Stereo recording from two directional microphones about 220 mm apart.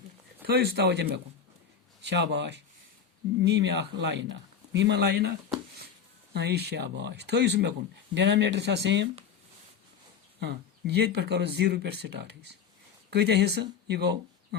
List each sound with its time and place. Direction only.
0.4 s speech: 45° right (ahead or behind)
2.0 s speech: 55° right (ahead or behind)
6.3 s speech: 50° right (ahead or behind)
10.4 s speech: 50° right (ahead or behind)